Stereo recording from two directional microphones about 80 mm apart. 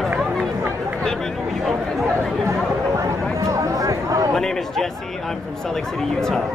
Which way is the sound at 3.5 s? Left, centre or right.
Right.